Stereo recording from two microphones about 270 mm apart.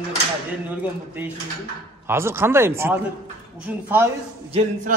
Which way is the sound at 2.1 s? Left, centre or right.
Centre.